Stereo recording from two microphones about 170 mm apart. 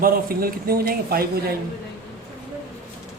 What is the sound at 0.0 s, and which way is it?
A man's voice, 60° right (ahead or behind).